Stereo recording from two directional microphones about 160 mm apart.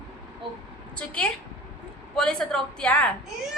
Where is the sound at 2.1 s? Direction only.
5° left (ahead or behind).